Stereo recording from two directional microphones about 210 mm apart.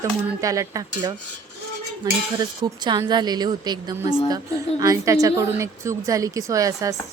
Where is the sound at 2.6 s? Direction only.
20° right (ahead or behind).